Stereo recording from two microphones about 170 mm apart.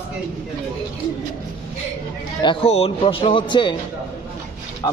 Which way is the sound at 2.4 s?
30° left (ahead or behind).